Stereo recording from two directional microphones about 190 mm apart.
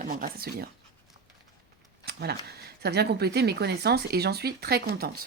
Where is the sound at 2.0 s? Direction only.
55° right (ahead or behind).